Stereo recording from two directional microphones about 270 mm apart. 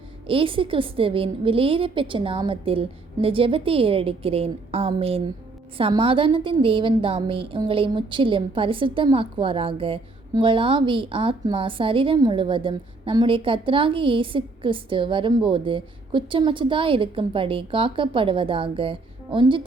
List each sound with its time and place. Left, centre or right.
0.3 s a woman's voice: centre